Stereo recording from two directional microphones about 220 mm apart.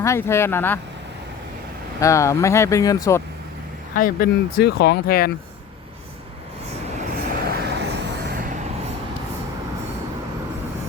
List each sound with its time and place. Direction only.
0.0 s speech: 10° left (ahead or behind)
2.0 s speech: 15° left (ahead or behind)
3.9 s speech: 40° left (ahead or behind)
7.3 s vehicle: 45° right (ahead or behind)